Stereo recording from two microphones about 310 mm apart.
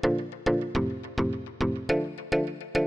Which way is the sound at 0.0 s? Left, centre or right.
Centre.